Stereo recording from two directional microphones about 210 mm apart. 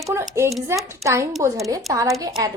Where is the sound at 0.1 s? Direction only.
10° right (ahead or behind).